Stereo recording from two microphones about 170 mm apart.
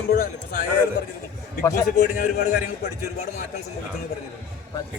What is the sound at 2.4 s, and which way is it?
Speech, 70° left (ahead or behind).